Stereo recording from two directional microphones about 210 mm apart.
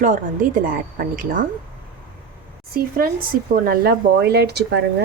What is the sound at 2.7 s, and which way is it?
A woman's voice, 45° right (ahead or behind).